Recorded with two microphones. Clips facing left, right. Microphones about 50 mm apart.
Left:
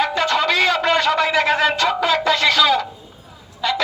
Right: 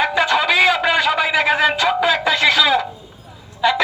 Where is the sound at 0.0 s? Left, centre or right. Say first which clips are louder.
Right 2 dB; centre.